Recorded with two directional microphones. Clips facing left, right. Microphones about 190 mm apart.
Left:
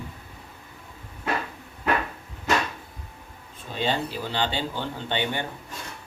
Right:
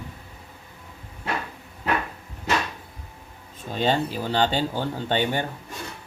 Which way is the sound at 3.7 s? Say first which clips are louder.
Right 4 dB; 45° right (ahead or behind).